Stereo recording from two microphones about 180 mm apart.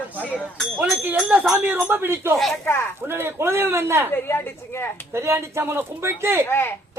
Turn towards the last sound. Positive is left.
turn(degrees=15)  # may be behind; listen again after turning